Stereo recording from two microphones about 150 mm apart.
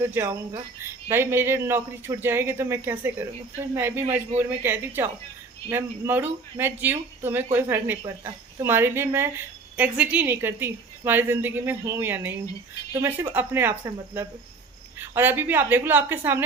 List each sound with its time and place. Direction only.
0.0 s a woman's voice: 15° right (ahead or behind)
14.9 s a woman's voice: 15° right (ahead or behind)